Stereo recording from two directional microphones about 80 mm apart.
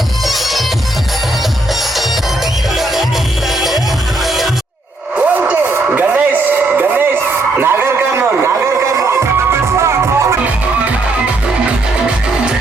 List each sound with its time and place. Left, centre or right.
0.3 s music: centre
2.7 s music: centre
5.1 s a sound: centre
7.5 s music: right